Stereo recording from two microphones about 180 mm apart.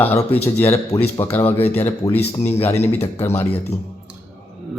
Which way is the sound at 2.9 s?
35° left (ahead or behind).